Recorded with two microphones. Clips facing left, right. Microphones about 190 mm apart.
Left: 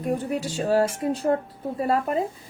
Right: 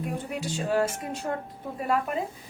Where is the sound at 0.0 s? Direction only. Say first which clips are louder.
Left 6 dB; 40° left (ahead or behind).